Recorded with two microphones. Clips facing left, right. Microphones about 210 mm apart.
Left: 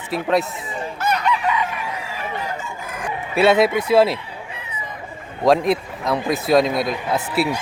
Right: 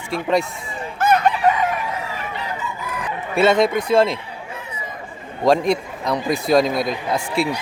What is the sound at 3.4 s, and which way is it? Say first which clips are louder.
Speech: left 1 dB; 5° left (ahead or behind).